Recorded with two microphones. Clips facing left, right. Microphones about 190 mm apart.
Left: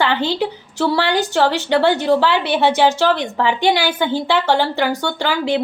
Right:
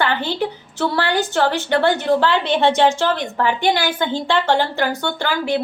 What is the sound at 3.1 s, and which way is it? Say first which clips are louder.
A woman's voice: left 1 dB; 20° left (ahead or behind).